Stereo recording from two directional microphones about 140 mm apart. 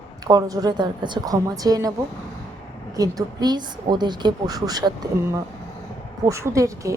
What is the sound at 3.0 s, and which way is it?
A woman's voice, 30° right (ahead or behind).